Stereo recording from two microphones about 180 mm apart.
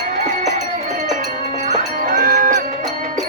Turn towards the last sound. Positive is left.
turn(degrees=-50)  # may be behind; listen again after turning